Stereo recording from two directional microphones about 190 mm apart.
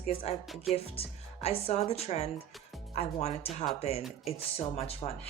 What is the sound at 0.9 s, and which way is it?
Speech, 30° left (ahead or behind).